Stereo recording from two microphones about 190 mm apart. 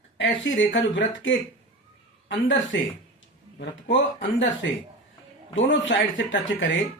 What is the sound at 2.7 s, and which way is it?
Speech, 70° left (ahead or behind).